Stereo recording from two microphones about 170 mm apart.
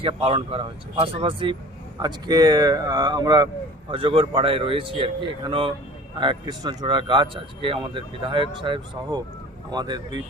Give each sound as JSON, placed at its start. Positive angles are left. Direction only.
{"t": 0.0, "sound": "speech", "side_deg": -30}